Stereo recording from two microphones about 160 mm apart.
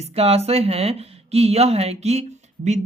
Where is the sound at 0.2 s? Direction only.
40° right (ahead or behind).